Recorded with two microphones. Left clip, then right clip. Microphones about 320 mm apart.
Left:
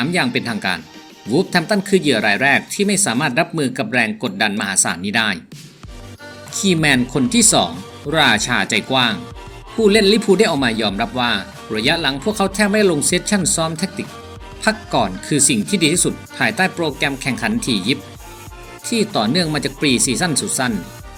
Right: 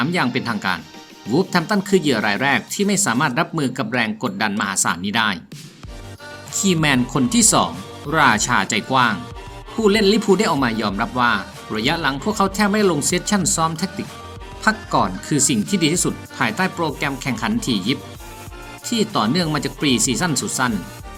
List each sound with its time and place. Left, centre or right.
0.0 s speech: centre
6.5 s speech: centre
7.3 s speech: right
8.1 s speech: centre
18.9 s speech: centre